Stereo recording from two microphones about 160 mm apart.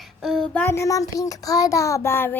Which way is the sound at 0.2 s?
Centre (ahead or behind).